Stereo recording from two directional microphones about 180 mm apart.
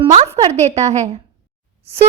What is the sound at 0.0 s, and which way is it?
A woman's voice, 30° right (ahead or behind).